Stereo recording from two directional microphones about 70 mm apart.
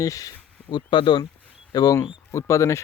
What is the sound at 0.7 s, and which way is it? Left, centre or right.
Speech, left.